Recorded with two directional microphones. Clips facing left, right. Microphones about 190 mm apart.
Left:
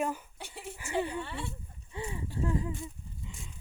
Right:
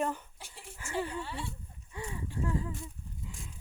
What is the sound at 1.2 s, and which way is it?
Speech, 55° left (ahead or behind).